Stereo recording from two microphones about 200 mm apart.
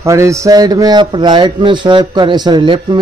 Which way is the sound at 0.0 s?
15° right (ahead or behind).